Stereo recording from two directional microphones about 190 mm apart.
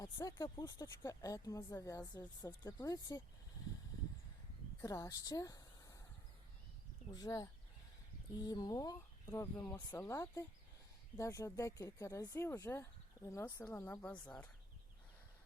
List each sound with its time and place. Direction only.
0.0 s speech: 20° left (ahead or behind)
4.8 s speech: 20° left (ahead or behind)
7.1 s speech: 20° left (ahead or behind)